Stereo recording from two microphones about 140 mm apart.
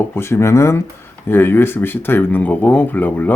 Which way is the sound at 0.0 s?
15° left (ahead or behind).